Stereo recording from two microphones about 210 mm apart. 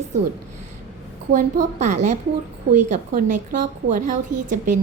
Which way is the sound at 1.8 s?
35° right (ahead or behind).